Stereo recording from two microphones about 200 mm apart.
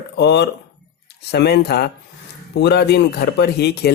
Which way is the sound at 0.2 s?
55° left (ahead or behind).